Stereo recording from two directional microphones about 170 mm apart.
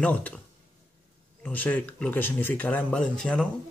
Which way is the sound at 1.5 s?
10° left (ahead or behind).